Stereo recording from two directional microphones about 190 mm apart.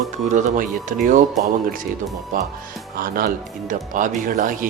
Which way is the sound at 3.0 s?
50° right (ahead or behind).